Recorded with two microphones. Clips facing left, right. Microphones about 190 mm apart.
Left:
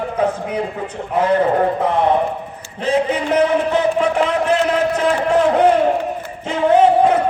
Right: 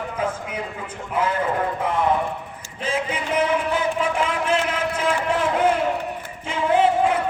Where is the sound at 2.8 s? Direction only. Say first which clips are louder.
Left 8 dB; 35° left (ahead or behind).